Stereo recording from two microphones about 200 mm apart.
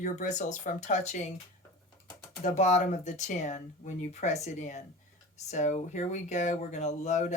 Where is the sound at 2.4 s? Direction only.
35° left (ahead or behind).